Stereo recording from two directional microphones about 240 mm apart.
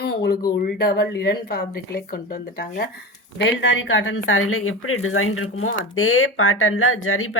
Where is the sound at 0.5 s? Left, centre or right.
Left.